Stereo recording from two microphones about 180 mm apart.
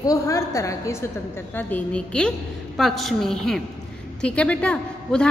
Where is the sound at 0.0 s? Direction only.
20° left (ahead or behind).